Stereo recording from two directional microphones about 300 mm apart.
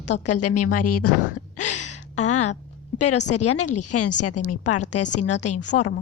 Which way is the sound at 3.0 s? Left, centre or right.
Left.